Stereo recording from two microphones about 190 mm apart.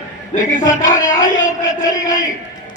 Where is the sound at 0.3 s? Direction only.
35° left (ahead or behind).